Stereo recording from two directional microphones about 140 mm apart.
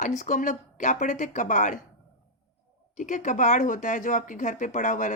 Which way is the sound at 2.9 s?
60° left (ahead or behind).